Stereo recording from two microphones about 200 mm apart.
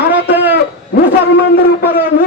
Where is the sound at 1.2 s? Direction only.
55° left (ahead or behind).